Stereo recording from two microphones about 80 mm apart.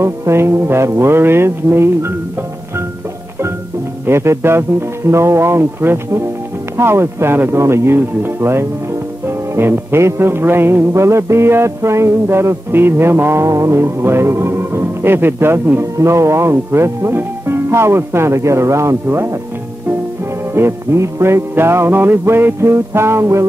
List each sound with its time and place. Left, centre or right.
0.0 s music: right
4.0 s music: right
20.5 s music: right